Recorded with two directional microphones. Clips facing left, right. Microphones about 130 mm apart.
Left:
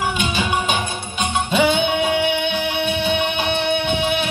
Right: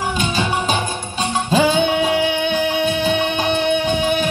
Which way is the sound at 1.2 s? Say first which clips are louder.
Right 1 dB; 35° right (ahead or behind).